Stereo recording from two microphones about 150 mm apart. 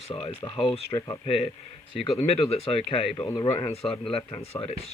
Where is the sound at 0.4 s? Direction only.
25° left (ahead or behind).